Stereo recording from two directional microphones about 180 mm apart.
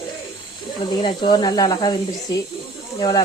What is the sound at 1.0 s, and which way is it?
Speech, 25° left (ahead or behind).